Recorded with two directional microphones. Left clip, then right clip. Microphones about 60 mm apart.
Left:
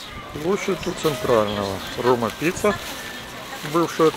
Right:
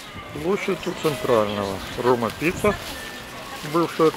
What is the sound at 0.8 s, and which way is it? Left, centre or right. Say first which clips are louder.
Speech: left 1 dB; centre.